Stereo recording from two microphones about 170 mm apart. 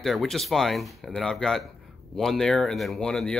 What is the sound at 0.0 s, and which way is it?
Speech, centre (ahead or behind).